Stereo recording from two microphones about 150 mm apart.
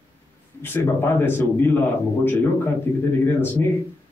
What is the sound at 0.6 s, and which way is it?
A man's voice, 15° left (ahead or behind).